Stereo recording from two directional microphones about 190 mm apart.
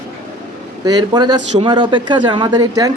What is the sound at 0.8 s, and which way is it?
Speech, 20° right (ahead or behind).